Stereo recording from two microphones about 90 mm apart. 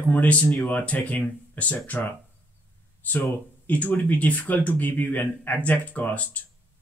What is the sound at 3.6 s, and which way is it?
Speech, 20° left (ahead or behind).